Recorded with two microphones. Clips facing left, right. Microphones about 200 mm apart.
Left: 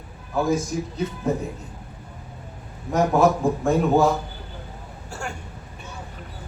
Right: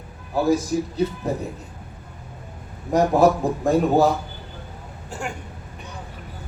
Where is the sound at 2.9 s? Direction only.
35° right (ahead or behind).